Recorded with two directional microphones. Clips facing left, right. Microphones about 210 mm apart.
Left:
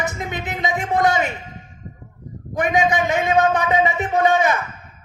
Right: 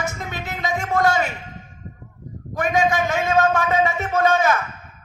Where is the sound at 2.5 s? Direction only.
20° left (ahead or behind).